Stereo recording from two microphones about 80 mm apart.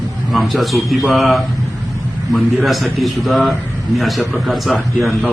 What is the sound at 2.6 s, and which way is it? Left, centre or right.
A man's voice, centre.